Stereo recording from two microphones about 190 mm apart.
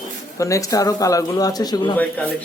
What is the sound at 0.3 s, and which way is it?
Speech, 15° left (ahead or behind).